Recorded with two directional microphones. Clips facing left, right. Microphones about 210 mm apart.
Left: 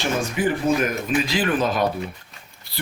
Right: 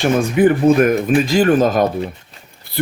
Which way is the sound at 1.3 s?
45° right (ahead or behind).